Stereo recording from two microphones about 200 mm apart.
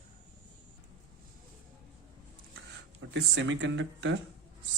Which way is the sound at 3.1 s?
65° right (ahead or behind).